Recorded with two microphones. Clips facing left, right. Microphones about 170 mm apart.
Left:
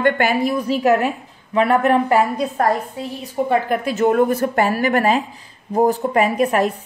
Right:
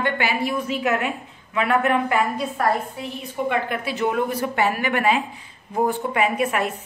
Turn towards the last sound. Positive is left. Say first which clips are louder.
# left 5 dB
turn(degrees=40)  # may be behind; listen again after turning